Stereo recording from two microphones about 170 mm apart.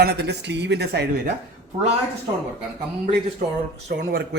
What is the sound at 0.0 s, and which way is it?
A man's voice, 75° right (ahead or behind).